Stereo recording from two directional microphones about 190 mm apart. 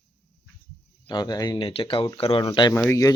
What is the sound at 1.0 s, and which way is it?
Speech, 20° left (ahead or behind).